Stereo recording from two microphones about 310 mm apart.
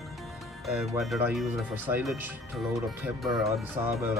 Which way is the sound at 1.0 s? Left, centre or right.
Centre.